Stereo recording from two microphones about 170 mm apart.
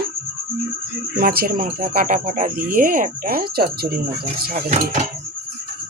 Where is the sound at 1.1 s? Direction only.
60° right (ahead or behind).